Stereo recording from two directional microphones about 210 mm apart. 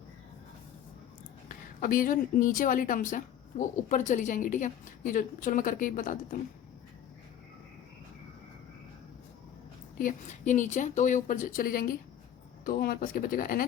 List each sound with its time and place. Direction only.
1.8 s speech: 40° left (ahead or behind)
10.0 s speech: 35° left (ahead or behind)